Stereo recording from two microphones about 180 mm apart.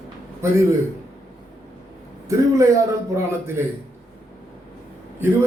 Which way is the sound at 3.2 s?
15° right (ahead or behind).